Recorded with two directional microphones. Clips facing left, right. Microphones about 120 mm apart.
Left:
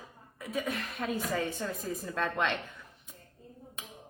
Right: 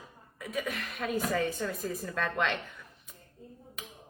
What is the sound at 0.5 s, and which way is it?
A woman's voice, 25° left (ahead or behind).